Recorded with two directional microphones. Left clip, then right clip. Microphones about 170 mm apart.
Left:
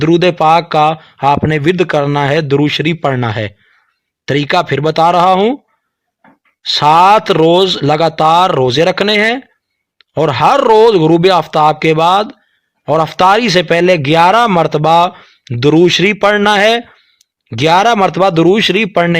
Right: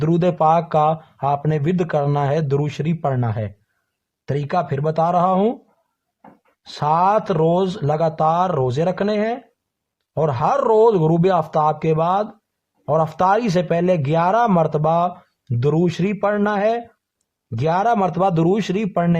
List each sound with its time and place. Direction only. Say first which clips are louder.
0.0 s speech: left 8 dB; 15° left (ahead or behind)
3.1 s a man's voice: left 9 dB; 35° left (ahead or behind)
6.7 s a man's voice: left 10 dB; 20° left (ahead or behind)